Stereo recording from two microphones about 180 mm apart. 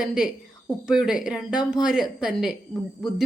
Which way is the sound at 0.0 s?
5° right (ahead or behind).